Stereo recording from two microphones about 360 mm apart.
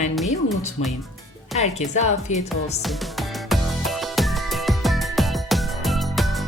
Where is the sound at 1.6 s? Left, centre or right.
Centre.